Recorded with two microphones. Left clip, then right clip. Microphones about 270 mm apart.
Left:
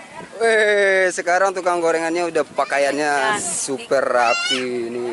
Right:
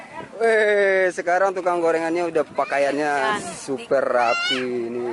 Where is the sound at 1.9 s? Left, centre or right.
Centre.